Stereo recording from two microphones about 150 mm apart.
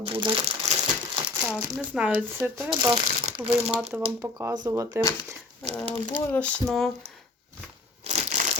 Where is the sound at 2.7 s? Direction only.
30° right (ahead or behind).